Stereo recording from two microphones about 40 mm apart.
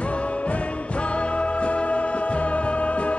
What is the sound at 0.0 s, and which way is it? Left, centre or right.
Music, left.